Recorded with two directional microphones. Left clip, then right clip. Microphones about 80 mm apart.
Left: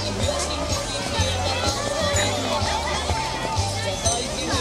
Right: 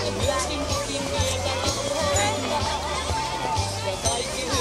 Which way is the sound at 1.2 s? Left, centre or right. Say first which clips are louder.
Left 3 dB; right.